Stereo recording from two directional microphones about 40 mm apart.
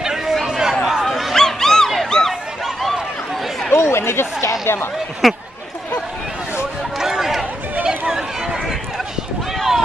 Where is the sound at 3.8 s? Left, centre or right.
Left.